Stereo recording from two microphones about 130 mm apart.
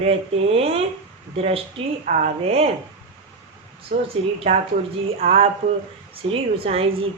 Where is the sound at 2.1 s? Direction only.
65° right (ahead or behind).